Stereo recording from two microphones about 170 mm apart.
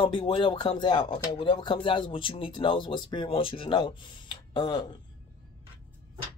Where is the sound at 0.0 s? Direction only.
30° left (ahead or behind).